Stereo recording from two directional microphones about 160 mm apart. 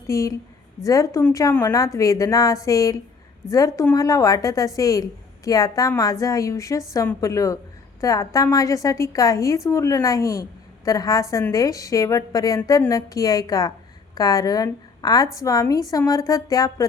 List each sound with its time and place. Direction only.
0.1 s a woman's voice: 20° left (ahead or behind)